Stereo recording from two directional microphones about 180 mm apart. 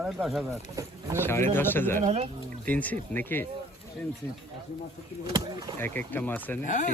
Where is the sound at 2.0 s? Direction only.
40° right (ahead or behind).